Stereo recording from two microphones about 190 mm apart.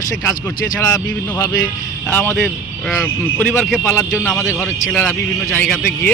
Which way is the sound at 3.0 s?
10° left (ahead or behind).